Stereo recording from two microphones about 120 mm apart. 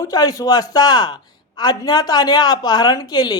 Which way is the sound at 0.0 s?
30° left (ahead or behind).